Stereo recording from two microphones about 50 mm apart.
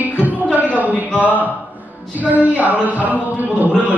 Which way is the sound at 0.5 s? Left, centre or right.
Right.